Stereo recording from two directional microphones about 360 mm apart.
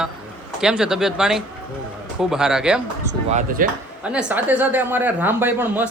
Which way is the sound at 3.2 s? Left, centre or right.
Right.